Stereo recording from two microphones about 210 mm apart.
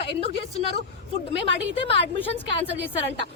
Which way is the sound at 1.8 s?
25° left (ahead or behind).